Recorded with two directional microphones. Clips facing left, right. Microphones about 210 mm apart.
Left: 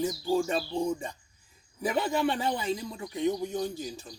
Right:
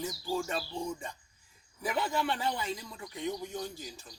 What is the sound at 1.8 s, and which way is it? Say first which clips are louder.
Speech: left 5 dB; 20° left (ahead or behind).